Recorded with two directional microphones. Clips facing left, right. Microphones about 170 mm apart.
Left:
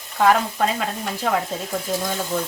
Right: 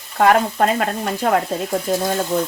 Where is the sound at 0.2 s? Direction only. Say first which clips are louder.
Right 3 dB; 55° right (ahead or behind).